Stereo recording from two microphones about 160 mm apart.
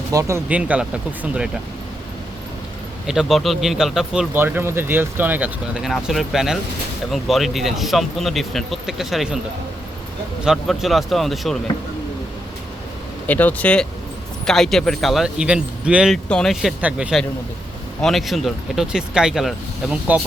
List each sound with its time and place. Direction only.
0.1 s speech: 20° right (ahead or behind)
0.4 s speech: 10° right (ahead or behind)
3.1 s speech: centre (ahead or behind)
10.4 s speech: centre (ahead or behind)
13.2 s speech: 10° left (ahead or behind)